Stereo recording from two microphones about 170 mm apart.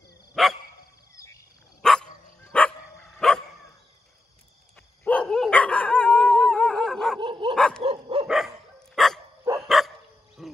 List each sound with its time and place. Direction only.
0.3 s dog: centre (ahead or behind)
1.1 s a sound: 20° left (ahead or behind)
1.8 s dog: 5° left (ahead or behind)
5.0 s dog: 10° left (ahead or behind)
7.2 s dog: 30° right (ahead or behind)
7.5 s dog: 5° left (ahead or behind)
7.8 s dog: 30° right (ahead or behind)
8.9 s dog: centre (ahead or behind)